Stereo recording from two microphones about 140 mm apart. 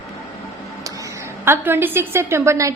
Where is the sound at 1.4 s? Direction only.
15° right (ahead or behind).